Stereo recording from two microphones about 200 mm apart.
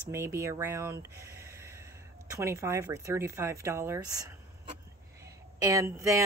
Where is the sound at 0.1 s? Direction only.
15° right (ahead or behind).